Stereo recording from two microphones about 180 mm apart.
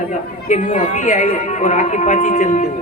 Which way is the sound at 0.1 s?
45° left (ahead or behind).